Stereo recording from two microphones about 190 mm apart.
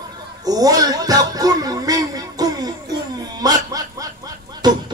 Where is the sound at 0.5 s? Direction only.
20° right (ahead or behind).